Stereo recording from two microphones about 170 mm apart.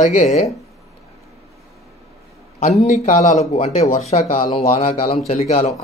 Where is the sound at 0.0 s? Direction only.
45° left (ahead or behind).